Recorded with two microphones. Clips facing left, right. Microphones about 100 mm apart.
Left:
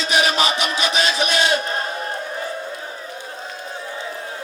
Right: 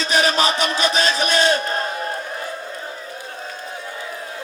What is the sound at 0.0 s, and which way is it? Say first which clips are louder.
Crowd: right 1 dB; 40° right (ahead or behind).